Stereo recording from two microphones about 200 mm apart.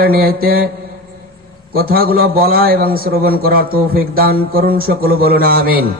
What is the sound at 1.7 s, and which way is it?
A man's voice, 50° right (ahead or behind).